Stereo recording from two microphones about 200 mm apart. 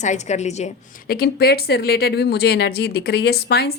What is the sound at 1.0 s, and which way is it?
Speech, 50° left (ahead or behind).